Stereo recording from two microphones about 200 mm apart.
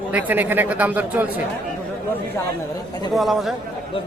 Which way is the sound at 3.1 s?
Centre (ahead or behind).